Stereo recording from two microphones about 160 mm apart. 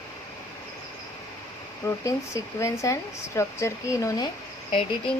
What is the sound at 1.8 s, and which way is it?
Speech, 20° left (ahead or behind).